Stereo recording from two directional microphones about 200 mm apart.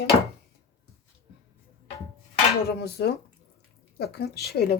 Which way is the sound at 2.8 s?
55° left (ahead or behind).